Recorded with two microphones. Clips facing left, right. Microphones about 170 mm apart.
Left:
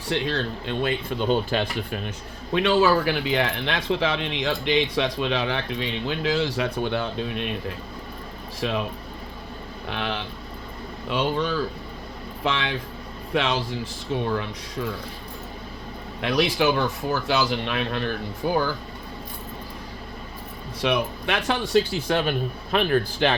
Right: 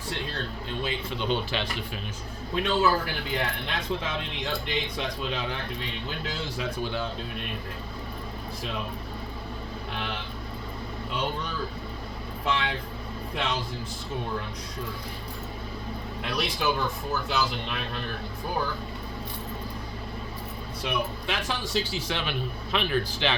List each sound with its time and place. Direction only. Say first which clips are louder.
0.1 s a man's voice: left 9 dB; 85° left; by 2.0 s 50° left (ahead or behind)
2.5 s speech: left 5 dB; 85° left; by 7.4 s 70° left (ahead or behind)
9.9 s speech: left 7 dB; 90° left
16.2 s speech: left 7 dB; 80° left
20.8 s a man's voice: left 6 dB; 80° left; by 23.3 s 50° left (ahead or behind)